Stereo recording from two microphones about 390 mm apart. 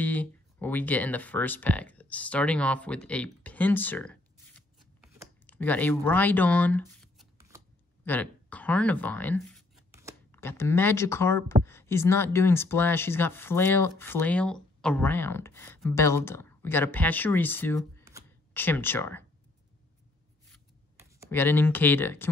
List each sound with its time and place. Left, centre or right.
0.0 s speech: centre
8.0 s a sound: centre
10.3 s speech: centre
21.3 s speech: centre